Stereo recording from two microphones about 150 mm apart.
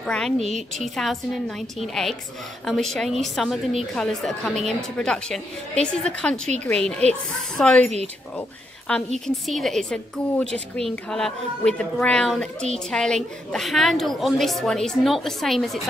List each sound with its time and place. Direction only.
0.0 s a woman's voice: 5° left (ahead or behind)
0.4 s a woman's voice: 50° right (ahead or behind)
0.7 s a woman's voice: centre (ahead or behind)